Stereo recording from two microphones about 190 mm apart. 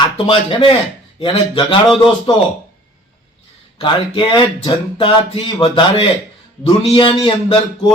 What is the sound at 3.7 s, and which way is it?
A man's voice, 25° left (ahead or behind).